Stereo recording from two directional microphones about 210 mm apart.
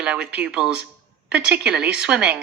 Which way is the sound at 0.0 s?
5° right (ahead or behind).